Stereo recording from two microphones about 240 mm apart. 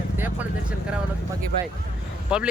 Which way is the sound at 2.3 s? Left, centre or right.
Centre.